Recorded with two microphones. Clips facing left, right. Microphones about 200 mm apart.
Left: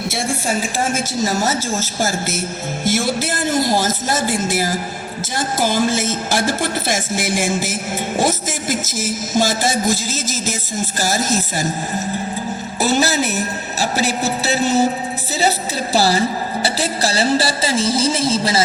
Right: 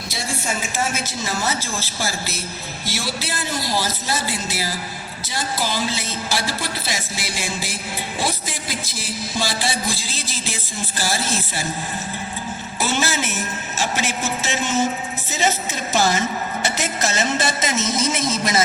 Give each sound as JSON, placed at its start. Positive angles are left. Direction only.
{"t": 0.1, "sound": "a sound", "side_deg": 50}
{"t": 0.4, "sound": "music", "side_deg": 40}
{"t": 12.8, "sound": "a woman's voice", "side_deg": 40}